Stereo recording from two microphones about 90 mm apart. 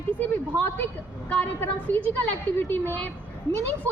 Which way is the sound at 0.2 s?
20° left (ahead or behind).